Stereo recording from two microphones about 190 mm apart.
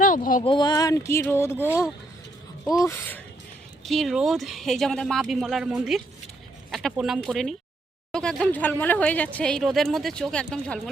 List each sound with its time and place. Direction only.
0.0 s speech: 45° left (ahead or behind)
0.4 s speech: 25° left (ahead or behind)
3.8 s speech: centre (ahead or behind)